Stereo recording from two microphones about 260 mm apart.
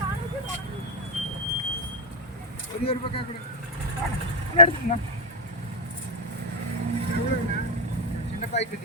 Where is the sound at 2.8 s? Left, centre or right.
Left.